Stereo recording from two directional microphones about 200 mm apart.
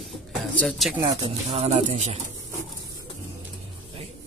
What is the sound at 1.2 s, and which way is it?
Speech, 30° right (ahead or behind).